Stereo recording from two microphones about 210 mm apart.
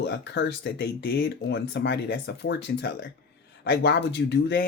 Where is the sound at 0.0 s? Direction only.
55° left (ahead or behind).